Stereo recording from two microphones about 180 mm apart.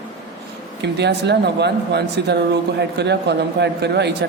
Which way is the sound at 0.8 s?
70° right (ahead or behind).